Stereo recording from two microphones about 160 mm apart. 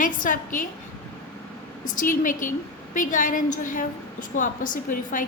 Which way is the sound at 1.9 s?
55° left (ahead or behind).